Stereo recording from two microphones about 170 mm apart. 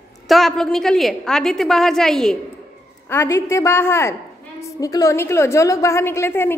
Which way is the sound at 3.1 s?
15° left (ahead or behind).